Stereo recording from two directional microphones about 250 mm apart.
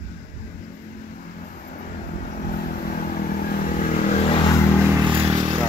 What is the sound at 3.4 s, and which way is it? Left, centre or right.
Vehicle, left.